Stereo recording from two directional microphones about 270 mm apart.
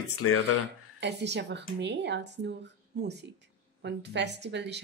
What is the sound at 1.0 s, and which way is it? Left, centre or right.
Speech, right.